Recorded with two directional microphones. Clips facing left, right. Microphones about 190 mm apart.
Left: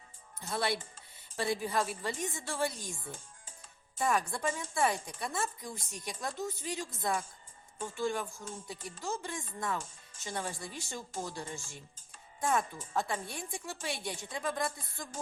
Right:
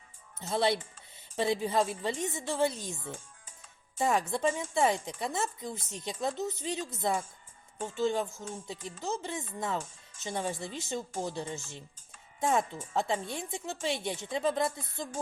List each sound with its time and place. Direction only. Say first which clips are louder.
0.3 s speech: right 5 dB; 25° right (ahead or behind)